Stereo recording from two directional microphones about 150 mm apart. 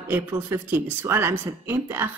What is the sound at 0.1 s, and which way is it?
A woman's voice, 15° right (ahead or behind).